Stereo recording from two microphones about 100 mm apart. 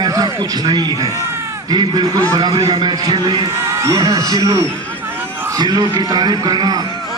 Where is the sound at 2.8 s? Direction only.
45° right (ahead or behind).